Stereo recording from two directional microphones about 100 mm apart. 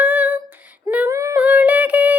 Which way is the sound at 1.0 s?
30° right (ahead or behind).